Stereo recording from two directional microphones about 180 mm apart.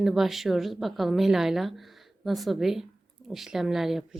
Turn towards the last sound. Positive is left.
turn(degrees=0)  # may be behind; listen again after turning